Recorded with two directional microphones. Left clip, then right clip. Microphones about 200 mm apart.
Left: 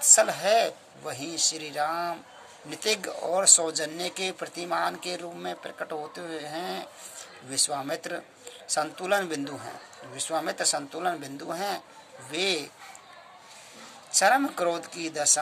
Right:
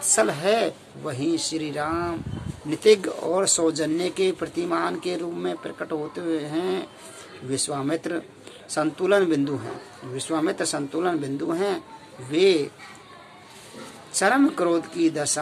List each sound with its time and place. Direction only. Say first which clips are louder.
0.0 s speech: right 1 dB; 35° left (ahead or behind)
14.1 s speech: right 2 dB; 35° left (ahead or behind)